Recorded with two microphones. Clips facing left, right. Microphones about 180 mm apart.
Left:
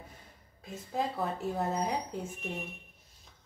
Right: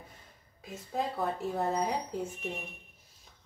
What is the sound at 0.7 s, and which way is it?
A woman's voice, centre (ahead or behind).